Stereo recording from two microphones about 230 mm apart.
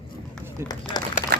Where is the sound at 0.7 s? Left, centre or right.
Centre.